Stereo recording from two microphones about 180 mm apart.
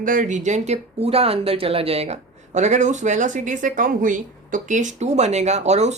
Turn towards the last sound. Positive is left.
turn(degrees=-40)  # may be behind; listen again after turning